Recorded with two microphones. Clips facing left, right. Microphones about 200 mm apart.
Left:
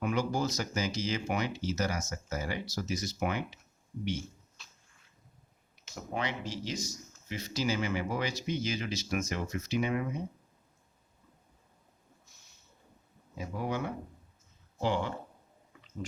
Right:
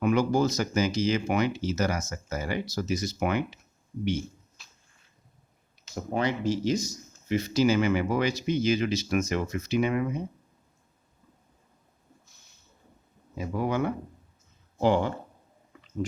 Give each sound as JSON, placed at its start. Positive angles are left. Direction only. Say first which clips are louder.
{"t": 0.0, "sound": "speech", "louder": "right 7 dB", "side_deg": -70}
{"t": 5.9, "sound": "speech", "louder": "right 7 dB", "side_deg": -40}
{"t": 7.3, "sound": "speech", "louder": "right 10 dB", "side_deg": -60}
{"t": 13.5, "sound": "speech", "louder": "right 7 dB", "side_deg": -75}
{"t": 14.8, "sound": "speech", "louder": "right 7 dB", "side_deg": -50}